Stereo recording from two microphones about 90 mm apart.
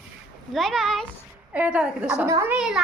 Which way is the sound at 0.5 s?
Centre (ahead or behind).